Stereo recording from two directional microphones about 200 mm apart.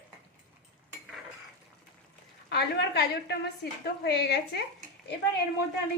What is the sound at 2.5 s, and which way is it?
A woman's voice, 55° left (ahead or behind).